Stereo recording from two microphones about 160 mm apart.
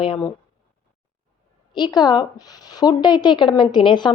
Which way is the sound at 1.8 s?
25° left (ahead or behind).